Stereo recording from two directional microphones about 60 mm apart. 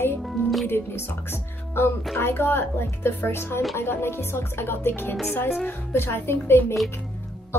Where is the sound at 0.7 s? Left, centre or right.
Left.